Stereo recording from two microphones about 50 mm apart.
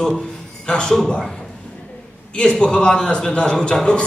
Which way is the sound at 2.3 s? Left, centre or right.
Centre.